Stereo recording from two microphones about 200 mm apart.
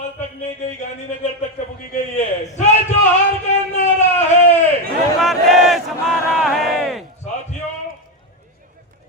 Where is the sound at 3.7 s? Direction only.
35° left (ahead or behind).